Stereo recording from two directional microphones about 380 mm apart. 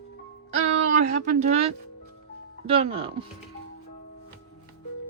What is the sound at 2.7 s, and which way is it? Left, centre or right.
Speech, centre.